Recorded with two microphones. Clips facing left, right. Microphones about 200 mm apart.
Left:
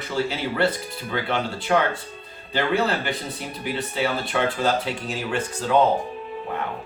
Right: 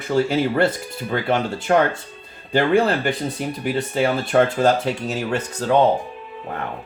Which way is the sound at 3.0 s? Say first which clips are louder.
Right 6 dB; 50° right (ahead or behind).